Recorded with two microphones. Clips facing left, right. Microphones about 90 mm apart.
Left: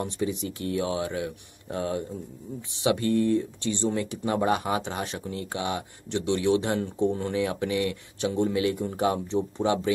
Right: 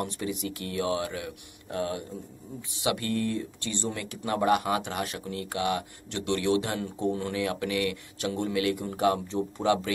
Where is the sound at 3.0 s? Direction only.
20° left (ahead or behind).